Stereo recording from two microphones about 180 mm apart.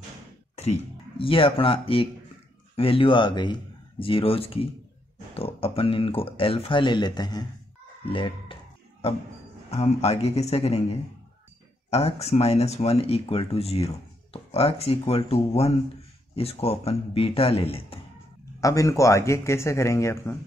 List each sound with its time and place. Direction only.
0.6 s speech: 35° left (ahead or behind)
18.6 s a man's voice: 20° left (ahead or behind)